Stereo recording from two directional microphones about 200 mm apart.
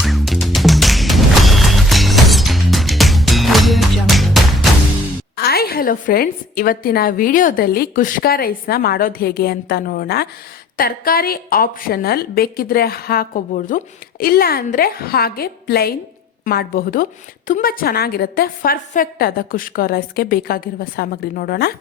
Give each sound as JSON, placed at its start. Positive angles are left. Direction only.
{"t": 0.0, "sound": "music", "side_deg": 0}
{"t": 5.4, "sound": "a woman's voice", "side_deg": 50}